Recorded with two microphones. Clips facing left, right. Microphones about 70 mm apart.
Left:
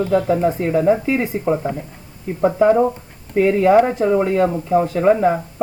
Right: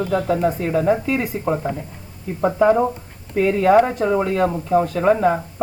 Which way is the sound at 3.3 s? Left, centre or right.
Centre.